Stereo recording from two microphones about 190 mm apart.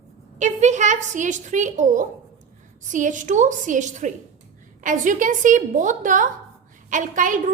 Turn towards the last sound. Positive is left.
turn(degrees=-45)  # may be behind; listen again after turning